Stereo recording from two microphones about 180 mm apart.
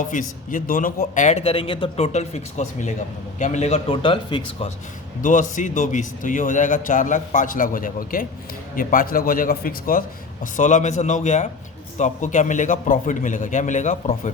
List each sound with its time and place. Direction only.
0.1 s a man's voice: 45° left (ahead or behind); by 4.7 s 25° left (ahead or behind)
5.2 s a man's voice: 45° left (ahead or behind)